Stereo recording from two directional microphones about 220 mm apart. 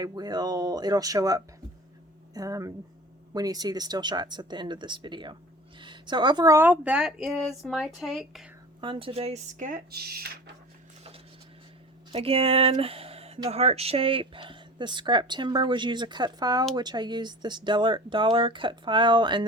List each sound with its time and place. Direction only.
0.0 s speech: 20° right (ahead or behind); by 8.4 s centre (ahead or behind)
8.8 s speech: 25° right (ahead or behind); by 10.5 s 45° right (ahead or behind)
12.1 s speech: 25° right (ahead or behind)